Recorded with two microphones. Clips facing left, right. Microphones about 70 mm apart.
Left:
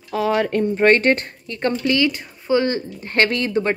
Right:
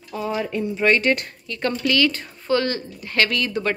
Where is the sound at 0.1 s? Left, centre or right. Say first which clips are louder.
Left 6 dB; left.